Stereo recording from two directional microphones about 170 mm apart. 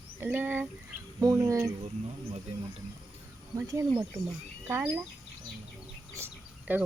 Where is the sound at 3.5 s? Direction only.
20° right (ahead or behind).